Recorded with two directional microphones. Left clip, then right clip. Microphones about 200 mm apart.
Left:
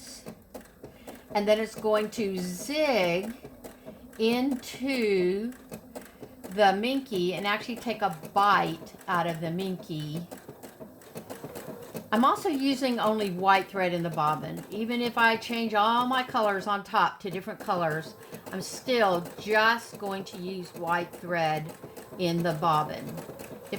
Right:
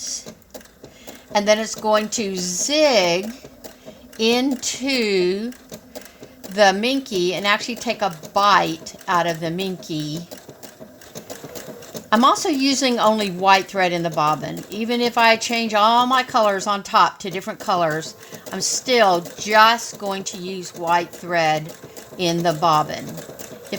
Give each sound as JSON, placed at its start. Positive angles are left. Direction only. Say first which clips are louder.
{"t": 1.3, "sound": "a woman's voice", "louder": "right 7 dB", "side_deg": -40}
{"t": 4.2, "sound": "a woman's voice", "louder": "right 8 dB", "side_deg": -40}
{"t": 6.6, "sound": "a woman's voice", "louder": "right 7 dB", "side_deg": -45}
{"t": 12.1, "sound": "a woman's voice", "louder": "right 8 dB", "side_deg": -45}